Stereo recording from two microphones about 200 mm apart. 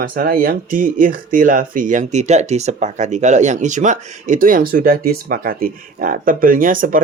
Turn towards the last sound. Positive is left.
turn(degrees=-45)  # may be behind; listen again after turning